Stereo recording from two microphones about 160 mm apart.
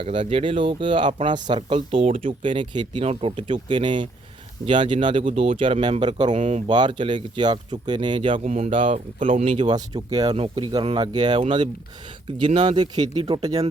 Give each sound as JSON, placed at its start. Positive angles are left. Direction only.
{"t": 0.0, "sound": "speech", "side_deg": -35}
{"t": 6.3, "sound": "speech", "side_deg": -45}
{"t": 6.7, "sound": "speech", "side_deg": -30}
{"t": 8.4, "sound": "speech", "side_deg": -50}
{"t": 9.5, "sound": "speech", "side_deg": -30}
{"t": 12.5, "sound": "speech", "side_deg": -30}